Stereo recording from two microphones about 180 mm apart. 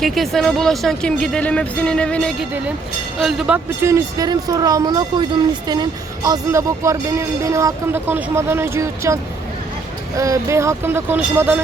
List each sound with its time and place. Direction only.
0.0 s speech: centre (ahead or behind); by 9.1 s 15° right (ahead or behind)
10.2 s speech: 15° right (ahead or behind)